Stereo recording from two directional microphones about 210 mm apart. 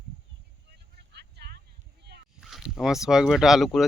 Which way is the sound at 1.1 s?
50° right (ahead or behind).